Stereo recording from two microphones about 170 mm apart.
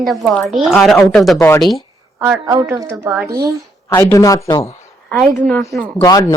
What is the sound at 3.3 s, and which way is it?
Speech, 20° right (ahead or behind).